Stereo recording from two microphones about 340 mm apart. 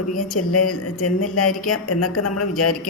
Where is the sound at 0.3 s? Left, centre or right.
Left.